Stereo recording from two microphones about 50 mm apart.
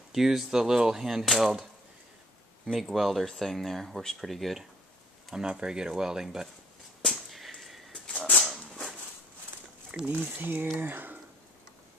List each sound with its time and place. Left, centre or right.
0.1 s speech: centre
2.6 s speech: centre
5.3 s speech: centre
7.2 s whip: centre
8.5 s a sound: centre
10.0 s speech: right
10.4 s speech: right